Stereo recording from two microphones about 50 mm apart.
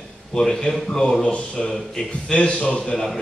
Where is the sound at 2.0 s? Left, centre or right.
Centre.